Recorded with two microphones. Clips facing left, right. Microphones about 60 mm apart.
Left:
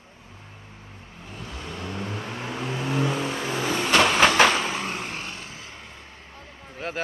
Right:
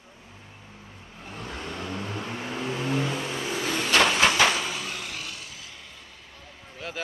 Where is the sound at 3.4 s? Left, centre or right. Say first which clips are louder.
Left 2 dB; left.